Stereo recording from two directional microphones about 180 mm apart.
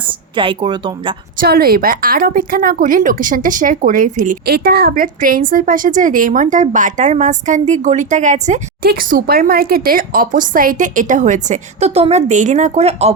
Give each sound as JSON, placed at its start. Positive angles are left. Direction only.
{"t": 0.1, "sound": "a woman's voice", "side_deg": -30}
{"t": 1.4, "sound": "a woman's voice", "side_deg": -55}
{"t": 8.9, "sound": "a woman's voice", "side_deg": -55}